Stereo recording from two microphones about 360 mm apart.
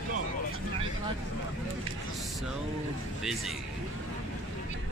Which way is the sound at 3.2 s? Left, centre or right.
Centre.